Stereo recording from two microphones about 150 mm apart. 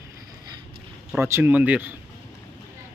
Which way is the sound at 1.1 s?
15° right (ahead or behind).